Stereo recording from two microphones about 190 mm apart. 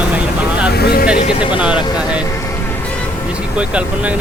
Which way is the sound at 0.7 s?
55° left (ahead or behind).